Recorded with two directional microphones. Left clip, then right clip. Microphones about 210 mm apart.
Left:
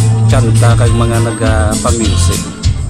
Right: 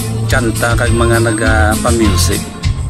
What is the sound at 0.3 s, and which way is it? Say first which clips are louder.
Speech: right 1 dB; centre (ahead or behind).